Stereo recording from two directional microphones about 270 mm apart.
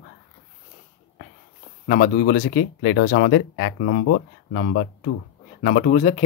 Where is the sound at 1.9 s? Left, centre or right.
Left.